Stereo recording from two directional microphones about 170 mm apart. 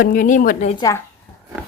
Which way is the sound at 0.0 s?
55° left (ahead or behind).